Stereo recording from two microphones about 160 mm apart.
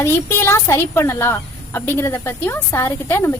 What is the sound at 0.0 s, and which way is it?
Speech, 15° left (ahead or behind).